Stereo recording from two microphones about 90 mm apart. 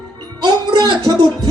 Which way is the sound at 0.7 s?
50° right (ahead or behind).